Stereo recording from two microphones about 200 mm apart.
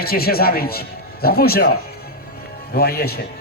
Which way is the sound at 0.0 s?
50° left (ahead or behind).